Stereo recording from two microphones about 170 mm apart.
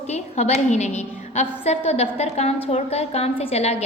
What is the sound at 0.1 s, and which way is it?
A woman's voice, 40° left (ahead or behind).